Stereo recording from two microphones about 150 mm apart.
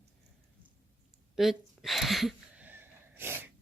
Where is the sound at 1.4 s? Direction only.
Centre (ahead or behind).